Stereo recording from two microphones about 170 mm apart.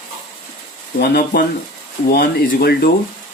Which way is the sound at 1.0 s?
65° left (ahead or behind).